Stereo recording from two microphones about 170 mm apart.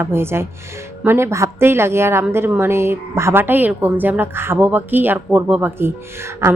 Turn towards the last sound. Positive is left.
turn(degrees=-15)  # may be behind; listen again after turning